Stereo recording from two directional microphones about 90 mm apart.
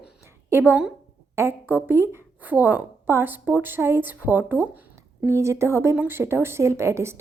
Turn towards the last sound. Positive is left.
turn(degrees=-30)  # may be behind; listen again after turning